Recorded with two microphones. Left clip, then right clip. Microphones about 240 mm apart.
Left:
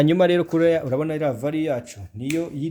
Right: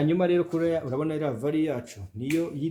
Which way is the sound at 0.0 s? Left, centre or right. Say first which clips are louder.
Left 6 dB; left.